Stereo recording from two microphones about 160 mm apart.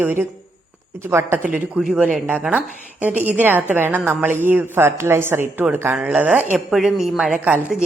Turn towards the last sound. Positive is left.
turn(degrees=-10)  # may be behind; listen again after turning